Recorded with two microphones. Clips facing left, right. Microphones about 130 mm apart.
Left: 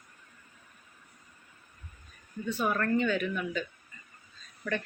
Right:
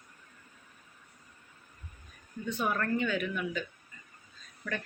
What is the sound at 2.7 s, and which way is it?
Speech, 5° right (ahead or behind).